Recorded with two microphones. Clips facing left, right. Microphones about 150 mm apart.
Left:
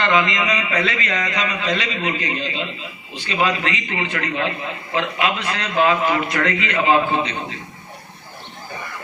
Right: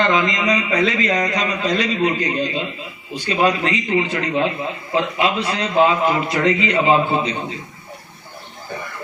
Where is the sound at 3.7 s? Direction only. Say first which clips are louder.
Right 6 dB; 30° right (ahead or behind).